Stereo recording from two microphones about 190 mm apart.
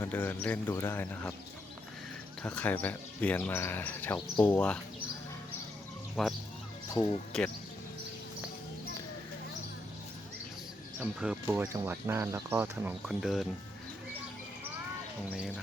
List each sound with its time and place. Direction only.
0.0 s speech: 10° left (ahead or behind)
2.4 s speech: 5° left (ahead or behind)
6.2 s speech: centre (ahead or behind)
6.9 s speech: 20° left (ahead or behind)
11.0 s speech: 5° right (ahead or behind)
15.4 s speech: centre (ahead or behind)